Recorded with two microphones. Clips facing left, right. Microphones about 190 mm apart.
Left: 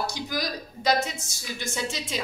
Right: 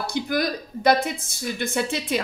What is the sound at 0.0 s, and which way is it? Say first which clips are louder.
A woman's voice: right 6 dB; 60° right (ahead or behind).